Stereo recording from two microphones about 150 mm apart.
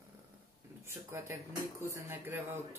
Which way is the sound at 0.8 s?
15° right (ahead or behind).